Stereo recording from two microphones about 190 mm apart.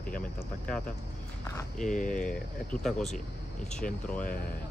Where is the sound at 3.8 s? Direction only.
45° left (ahead or behind).